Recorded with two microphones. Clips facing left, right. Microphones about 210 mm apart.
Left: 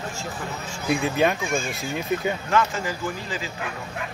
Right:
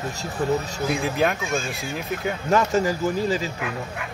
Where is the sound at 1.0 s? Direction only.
Centre (ahead or behind).